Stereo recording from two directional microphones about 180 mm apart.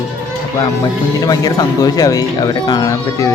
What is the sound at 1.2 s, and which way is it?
Speech, 20° left (ahead or behind).